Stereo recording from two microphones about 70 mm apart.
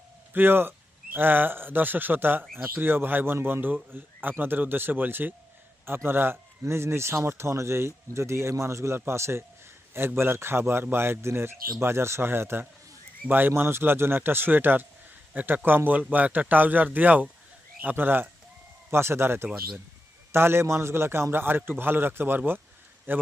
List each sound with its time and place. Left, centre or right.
0.3 s a man's voice: right